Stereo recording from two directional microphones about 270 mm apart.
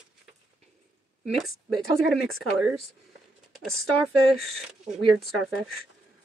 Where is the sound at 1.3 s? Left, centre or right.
Centre.